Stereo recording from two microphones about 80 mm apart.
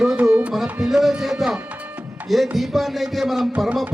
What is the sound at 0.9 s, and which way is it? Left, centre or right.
Music, centre.